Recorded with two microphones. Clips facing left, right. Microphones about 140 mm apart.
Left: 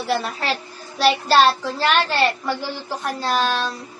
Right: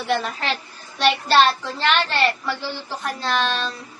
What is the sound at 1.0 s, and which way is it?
Speech, 35° left (ahead or behind).